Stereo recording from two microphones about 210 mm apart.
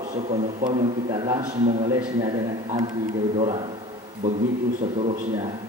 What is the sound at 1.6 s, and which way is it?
Speech, 30° right (ahead or behind).